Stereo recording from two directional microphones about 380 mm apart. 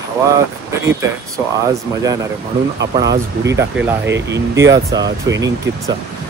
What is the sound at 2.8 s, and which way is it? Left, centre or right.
Speech, right.